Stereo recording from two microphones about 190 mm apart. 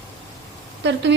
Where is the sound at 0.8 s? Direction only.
65° right (ahead or behind).